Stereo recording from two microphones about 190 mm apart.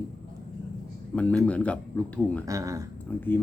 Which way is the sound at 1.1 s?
5° left (ahead or behind).